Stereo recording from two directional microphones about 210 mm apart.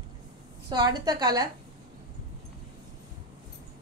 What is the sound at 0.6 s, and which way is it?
Speech, 20° right (ahead or behind).